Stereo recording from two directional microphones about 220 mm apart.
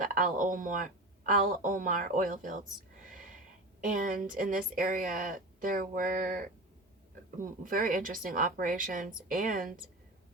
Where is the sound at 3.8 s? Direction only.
35° right (ahead or behind).